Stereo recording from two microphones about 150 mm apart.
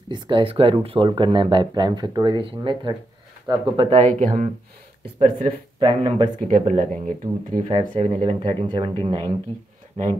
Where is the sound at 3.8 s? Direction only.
45° right (ahead or behind); by 4.8 s 60° right (ahead or behind).